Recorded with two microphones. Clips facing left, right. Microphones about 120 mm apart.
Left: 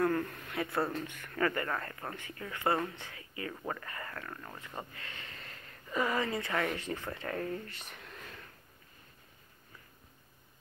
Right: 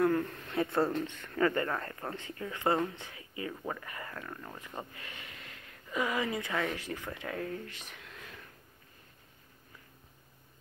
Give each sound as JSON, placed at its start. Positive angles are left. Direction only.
{"t": 0.0, "sound": "a sound", "side_deg": -15}
{"t": 0.5, "sound": "speech", "side_deg": -30}
{"t": 0.7, "sound": "speech", "side_deg": 0}
{"t": 1.0, "sound": "speech", "side_deg": -20}
{"t": 4.9, "sound": "a sound", "side_deg": -15}
{"t": 6.3, "sound": "speech", "side_deg": -5}
{"t": 6.9, "sound": "speech", "side_deg": 5}
{"t": 7.9, "sound": "whispering", "side_deg": 0}